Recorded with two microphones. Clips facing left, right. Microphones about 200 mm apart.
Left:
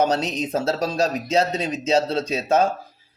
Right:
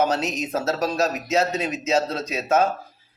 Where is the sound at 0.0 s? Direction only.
30° left (ahead or behind).